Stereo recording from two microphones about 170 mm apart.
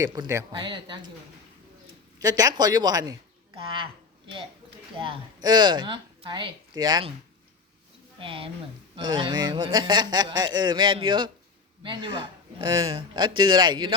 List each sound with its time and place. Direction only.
0.0 s a man's voice: 20° right (ahead or behind)
2.1 s speech: 20° right (ahead or behind)
4.9 s a man's voice: 30° right (ahead or behind)
8.2 s a man's voice: 30° right (ahead or behind)